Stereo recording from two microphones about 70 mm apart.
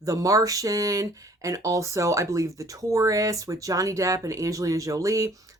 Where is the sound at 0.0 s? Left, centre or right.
Right.